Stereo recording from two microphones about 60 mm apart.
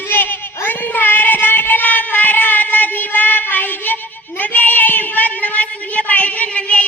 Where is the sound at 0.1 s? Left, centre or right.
Left.